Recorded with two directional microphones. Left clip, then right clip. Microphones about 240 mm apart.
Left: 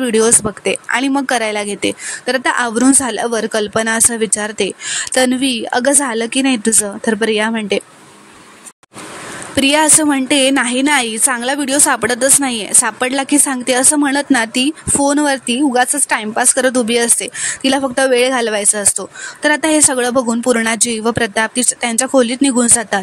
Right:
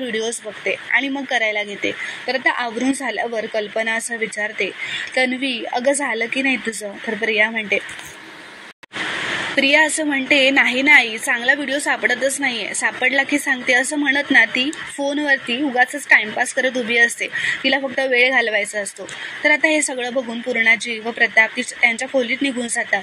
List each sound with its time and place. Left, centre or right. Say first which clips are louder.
0.0 s a woman's voice: left 10 dB; left
9.6 s a woman's voice: left 3 dB; left